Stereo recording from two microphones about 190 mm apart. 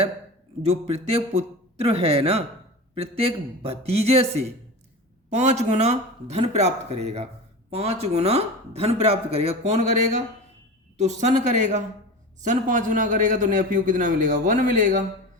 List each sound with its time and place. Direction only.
0.6 s a man's voice: 35° right (ahead or behind)